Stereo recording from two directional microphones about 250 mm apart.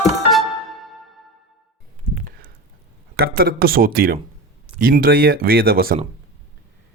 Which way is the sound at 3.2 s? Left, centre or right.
Right.